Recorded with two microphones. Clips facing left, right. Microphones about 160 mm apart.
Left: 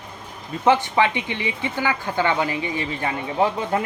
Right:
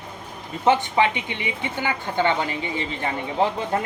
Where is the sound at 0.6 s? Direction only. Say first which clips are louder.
Left 1 dB; 20° right (ahead or behind).